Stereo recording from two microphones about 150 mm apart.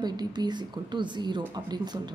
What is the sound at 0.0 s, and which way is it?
A woman's voice, 30° right (ahead or behind).